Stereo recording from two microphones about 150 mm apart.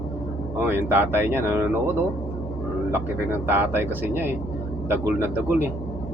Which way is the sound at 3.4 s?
15° right (ahead or behind).